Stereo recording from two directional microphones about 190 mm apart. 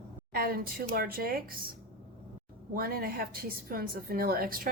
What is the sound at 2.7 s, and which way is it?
A woman's voice, 50° right (ahead or behind).